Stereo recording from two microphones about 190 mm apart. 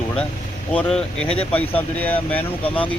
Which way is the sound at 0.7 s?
5° left (ahead or behind).